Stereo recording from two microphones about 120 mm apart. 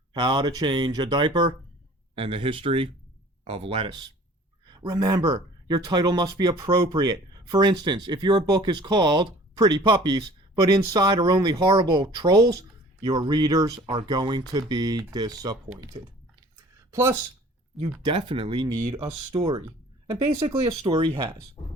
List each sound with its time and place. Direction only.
0.1 s speech: 40° right (ahead or behind)
4.6 s speech: 40° right (ahead or behind)
16.9 s speech: 20° right (ahead or behind)
17.8 s speech: 40° right (ahead or behind)